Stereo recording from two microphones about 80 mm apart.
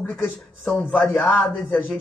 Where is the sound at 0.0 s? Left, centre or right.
Left.